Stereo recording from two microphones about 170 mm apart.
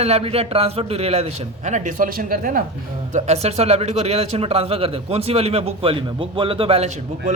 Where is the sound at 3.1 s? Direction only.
45° right (ahead or behind).